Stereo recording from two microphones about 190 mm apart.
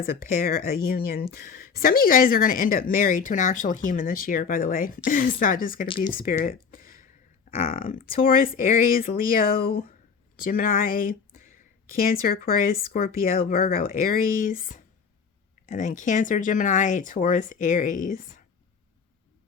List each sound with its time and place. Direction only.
0.0 s a woman's voice: 50° left (ahead or behind)
6.7 s a sound: 50° left (ahead or behind)
7.7 s a woman's voice: 45° left (ahead or behind)
9.6 s speech: 30° left (ahead or behind)
10.3 s a woman's voice: 45° left (ahead or behind)